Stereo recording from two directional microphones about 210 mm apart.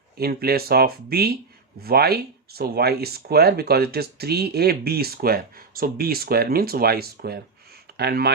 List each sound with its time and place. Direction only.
0.2 s speech: 45° right (ahead or behind)